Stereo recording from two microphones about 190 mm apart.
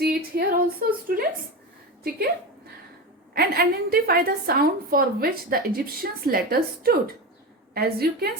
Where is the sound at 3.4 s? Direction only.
55° right (ahead or behind).